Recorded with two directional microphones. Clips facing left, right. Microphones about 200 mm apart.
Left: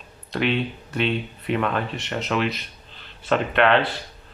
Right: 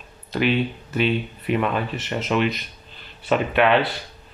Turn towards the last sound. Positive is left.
turn(degrees=-5)  # may be behind; listen again after turning